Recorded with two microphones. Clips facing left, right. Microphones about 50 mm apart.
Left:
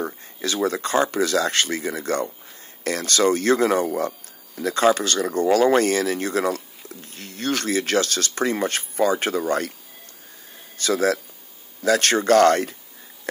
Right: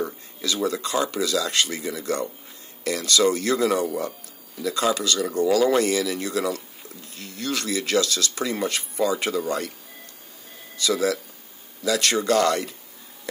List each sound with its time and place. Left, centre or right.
0.0 s speech: left
10.8 s speech: left